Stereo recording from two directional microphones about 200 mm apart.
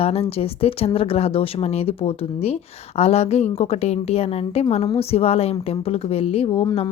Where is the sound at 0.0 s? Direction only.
30° left (ahead or behind).